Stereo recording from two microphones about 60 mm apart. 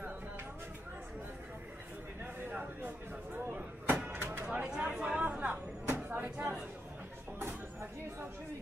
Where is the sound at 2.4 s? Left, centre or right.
Right.